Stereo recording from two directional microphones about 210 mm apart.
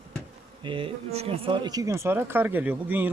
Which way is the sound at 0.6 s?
25° right (ahead or behind).